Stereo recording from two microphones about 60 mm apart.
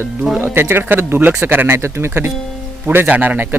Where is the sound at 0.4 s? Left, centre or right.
Right.